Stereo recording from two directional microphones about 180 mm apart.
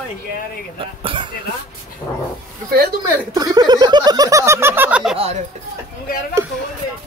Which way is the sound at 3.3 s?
20° right (ahead or behind).